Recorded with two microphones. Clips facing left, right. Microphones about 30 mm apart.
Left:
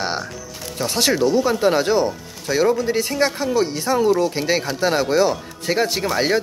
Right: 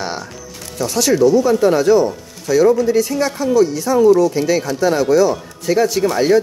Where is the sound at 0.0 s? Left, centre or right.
Left.